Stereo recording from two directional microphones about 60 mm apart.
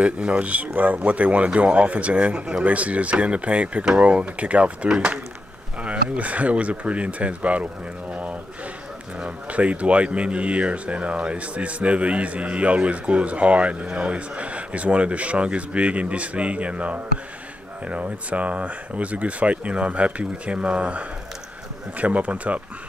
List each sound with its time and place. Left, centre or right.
0.0 s speech: centre
8.1 s a sound: right
9.2 s speech: right